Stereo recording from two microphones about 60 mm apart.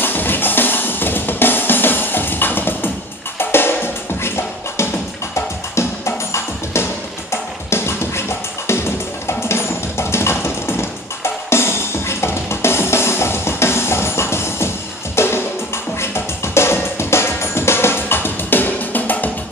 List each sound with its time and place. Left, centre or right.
0.0 s music: left
16.5 s music: left